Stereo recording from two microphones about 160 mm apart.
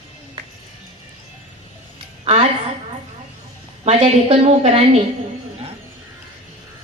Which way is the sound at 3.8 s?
45° right (ahead or behind).